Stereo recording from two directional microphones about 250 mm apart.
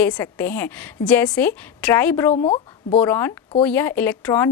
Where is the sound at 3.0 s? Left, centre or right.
Centre.